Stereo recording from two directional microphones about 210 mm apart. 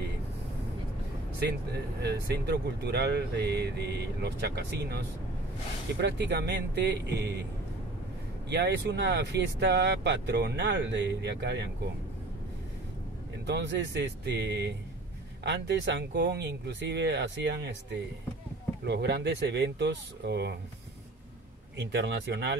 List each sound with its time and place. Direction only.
2.0 s speech: 50° right (ahead or behind)
8.5 s speech: 55° right (ahead or behind)
13.5 s speech: 55° right (ahead or behind)
18.9 s speech: 55° right (ahead or behind)
21.7 s speech: 55° right (ahead or behind)